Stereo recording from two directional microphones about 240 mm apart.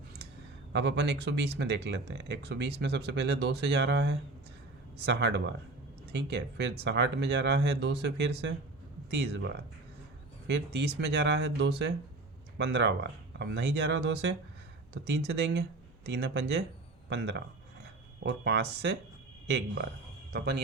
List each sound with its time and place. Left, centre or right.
0.7 s speech: right